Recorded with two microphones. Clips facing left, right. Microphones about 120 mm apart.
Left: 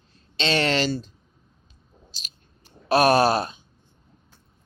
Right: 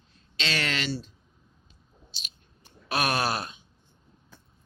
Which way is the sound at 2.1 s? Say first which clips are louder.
Even; 40° left (ahead or behind).